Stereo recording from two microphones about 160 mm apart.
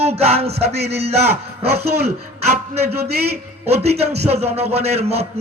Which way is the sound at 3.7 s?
40° right (ahead or behind).